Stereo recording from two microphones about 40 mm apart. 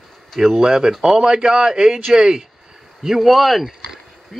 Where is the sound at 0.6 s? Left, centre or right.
Centre.